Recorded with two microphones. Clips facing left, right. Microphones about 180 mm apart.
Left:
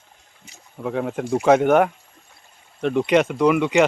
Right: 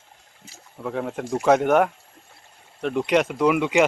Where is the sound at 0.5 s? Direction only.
Centre (ahead or behind).